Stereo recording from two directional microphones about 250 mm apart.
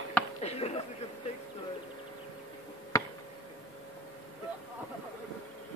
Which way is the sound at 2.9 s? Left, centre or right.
Centre.